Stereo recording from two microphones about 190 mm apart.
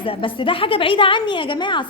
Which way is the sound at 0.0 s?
30° left (ahead or behind).